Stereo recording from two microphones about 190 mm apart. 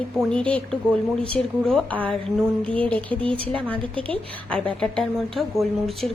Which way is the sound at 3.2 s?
30° right (ahead or behind).